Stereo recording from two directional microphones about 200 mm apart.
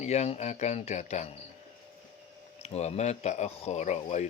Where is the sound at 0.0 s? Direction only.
35° left (ahead or behind).